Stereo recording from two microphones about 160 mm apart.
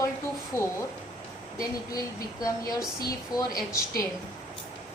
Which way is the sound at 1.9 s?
25° left (ahead or behind).